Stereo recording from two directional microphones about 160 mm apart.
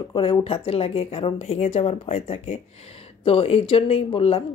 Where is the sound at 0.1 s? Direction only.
35° left (ahead or behind).